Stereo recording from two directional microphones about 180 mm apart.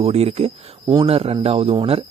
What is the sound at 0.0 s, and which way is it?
Speech, 35° right (ahead or behind).